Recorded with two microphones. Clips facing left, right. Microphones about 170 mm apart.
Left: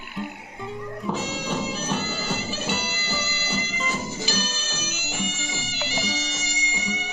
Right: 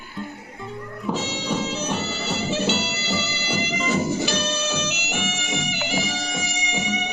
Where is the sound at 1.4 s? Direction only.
Centre (ahead or behind).